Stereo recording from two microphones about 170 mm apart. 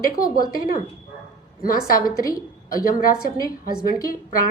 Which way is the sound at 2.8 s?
55° left (ahead or behind).